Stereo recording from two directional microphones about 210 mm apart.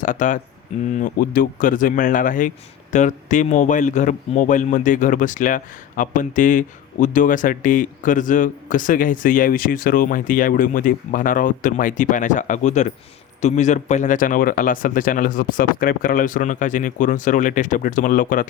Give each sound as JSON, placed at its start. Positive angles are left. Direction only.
{"t": 0.0, "sound": "a man's voice", "side_deg": 40}